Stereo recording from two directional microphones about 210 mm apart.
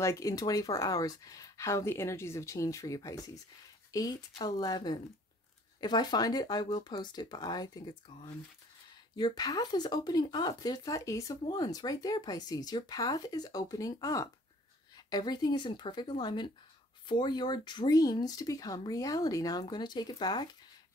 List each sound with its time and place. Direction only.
0.0 s speech: 15° left (ahead or behind)
9.1 s speech: 20° left (ahead or behind)